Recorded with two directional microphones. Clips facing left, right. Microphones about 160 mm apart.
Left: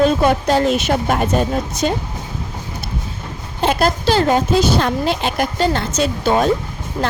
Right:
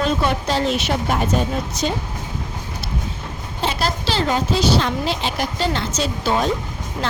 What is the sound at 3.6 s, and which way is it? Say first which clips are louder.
A woman's voice: left 6 dB; 50° left (ahead or behind).